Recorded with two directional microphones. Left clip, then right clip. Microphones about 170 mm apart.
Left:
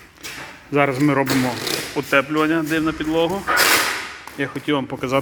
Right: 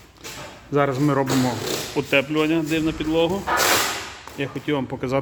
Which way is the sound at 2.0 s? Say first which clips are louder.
Left 2 dB; 20° right (ahead or behind).